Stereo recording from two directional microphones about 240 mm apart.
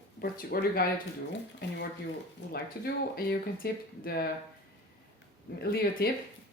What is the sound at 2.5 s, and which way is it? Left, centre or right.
Speech, left.